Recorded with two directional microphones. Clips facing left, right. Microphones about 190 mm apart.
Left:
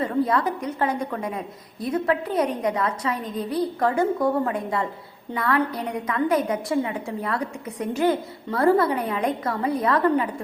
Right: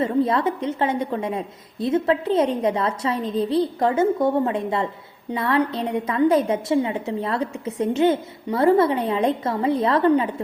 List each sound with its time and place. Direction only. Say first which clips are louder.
0.0 s a woman's voice: right 2 dB; 25° right (ahead or behind)